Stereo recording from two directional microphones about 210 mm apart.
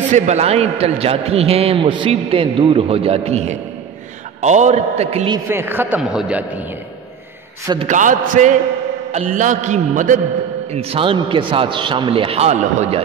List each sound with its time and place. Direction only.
0.1 s a man's voice: 30° right (ahead or behind)
5.5 s a man's voice: 10° right (ahead or behind)
7.6 s a man's voice: 20° right (ahead or behind)
7.9 s a man's voice: 40° right (ahead or behind)